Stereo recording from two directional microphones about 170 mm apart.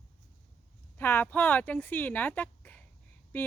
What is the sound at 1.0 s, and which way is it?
Speech, 10° left (ahead or behind).